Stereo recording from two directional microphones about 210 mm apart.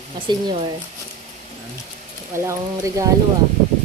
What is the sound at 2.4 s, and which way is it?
Speech, 15° right (ahead or behind).